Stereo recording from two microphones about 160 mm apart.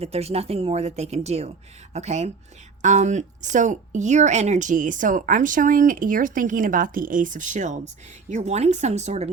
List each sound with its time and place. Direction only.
0.0 s speech: 40° right (ahead or behind)